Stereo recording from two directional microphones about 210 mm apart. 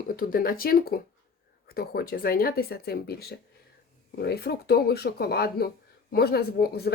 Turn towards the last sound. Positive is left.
turn(degrees=50)  # may be behind; listen again after turning